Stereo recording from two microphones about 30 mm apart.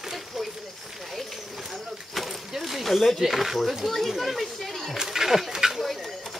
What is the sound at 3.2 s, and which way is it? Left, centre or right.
Speech, centre.